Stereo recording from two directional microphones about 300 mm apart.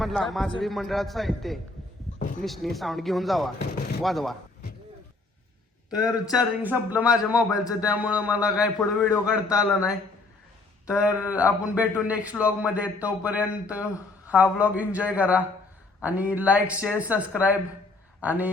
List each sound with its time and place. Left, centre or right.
0.0 s a man's voice: centre
5.9 s a man's voice: centre